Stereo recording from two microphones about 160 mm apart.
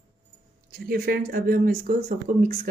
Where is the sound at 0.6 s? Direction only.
65° right (ahead or behind).